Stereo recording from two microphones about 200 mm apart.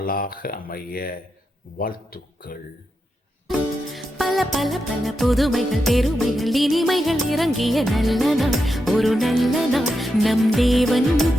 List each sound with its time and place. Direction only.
0.0 s speech: 45° left (ahead or behind)
3.9 s music: centre (ahead or behind)